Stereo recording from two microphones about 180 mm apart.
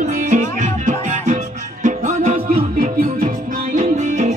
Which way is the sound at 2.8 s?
50° right (ahead or behind).